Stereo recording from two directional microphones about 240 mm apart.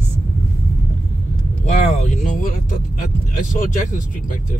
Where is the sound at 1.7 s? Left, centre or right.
Left.